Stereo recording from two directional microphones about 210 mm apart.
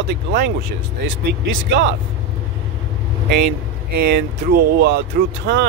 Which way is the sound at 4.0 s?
50° right (ahead or behind).